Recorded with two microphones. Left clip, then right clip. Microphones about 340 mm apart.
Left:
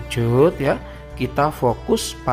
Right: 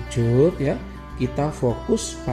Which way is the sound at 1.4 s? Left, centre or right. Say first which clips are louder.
Left 6 dB; left.